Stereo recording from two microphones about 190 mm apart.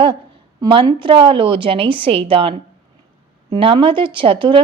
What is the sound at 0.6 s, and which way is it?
Speech, 25° right (ahead or behind).